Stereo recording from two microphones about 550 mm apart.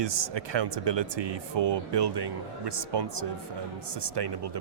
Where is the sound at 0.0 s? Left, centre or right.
Right.